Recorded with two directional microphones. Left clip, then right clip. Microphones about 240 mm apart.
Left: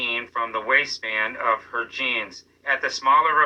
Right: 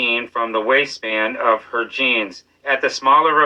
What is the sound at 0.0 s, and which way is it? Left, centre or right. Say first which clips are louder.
Speech: right 6 dB; right.